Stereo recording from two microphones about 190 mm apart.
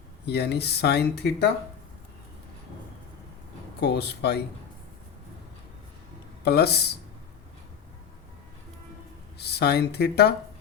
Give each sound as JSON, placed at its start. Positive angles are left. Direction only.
{"t": 0.3, "sound": "speech", "side_deg": 60}
{"t": 3.8, "sound": "speech", "side_deg": 60}
{"t": 6.4, "sound": "speech", "side_deg": 60}
{"t": 9.4, "sound": "speech", "side_deg": 60}